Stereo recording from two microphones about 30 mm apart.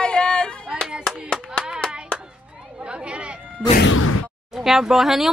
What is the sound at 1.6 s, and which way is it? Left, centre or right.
Hands, left.